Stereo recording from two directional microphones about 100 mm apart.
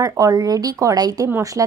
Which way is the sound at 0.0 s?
35° right (ahead or behind).